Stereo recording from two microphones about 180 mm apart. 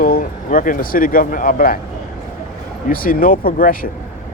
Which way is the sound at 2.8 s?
50° left (ahead or behind).